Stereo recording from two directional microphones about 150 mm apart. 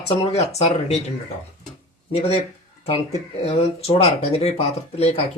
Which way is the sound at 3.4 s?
40° left (ahead or behind).